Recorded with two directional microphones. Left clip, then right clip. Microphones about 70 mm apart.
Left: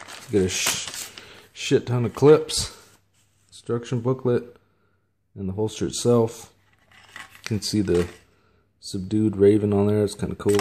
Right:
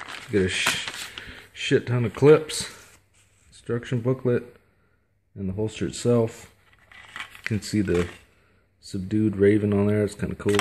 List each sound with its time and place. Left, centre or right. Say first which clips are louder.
0.3 s speech: even; left
1.2 s a sound: right 1 dB; left
2.1 s speech: left 1 dB; centre
3.4 s a sound: left 2 dB; centre
3.7 s speech: left 1 dB; centre
5.6 s speech: left 3 dB; left
7.8 s speech: left 2 dB; centre
8.8 s speech: left 1 dB; left